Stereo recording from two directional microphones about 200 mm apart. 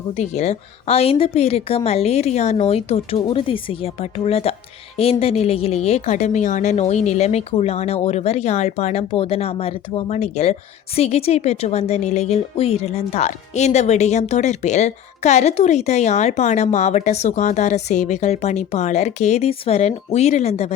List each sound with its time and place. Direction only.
0.1 s a woman's voice: 35° left (ahead or behind)